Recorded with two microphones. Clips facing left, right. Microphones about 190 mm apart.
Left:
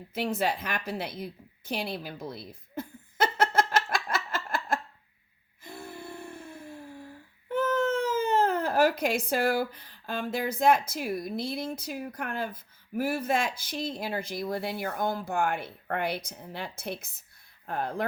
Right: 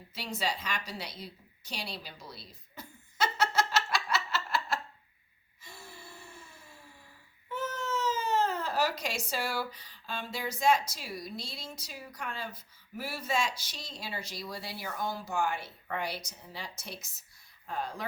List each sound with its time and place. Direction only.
0.1 s a sound: 55° left (ahead or behind)
5.6 s gasp: 55° left (ahead or behind)
7.4 s speech: 55° left (ahead or behind)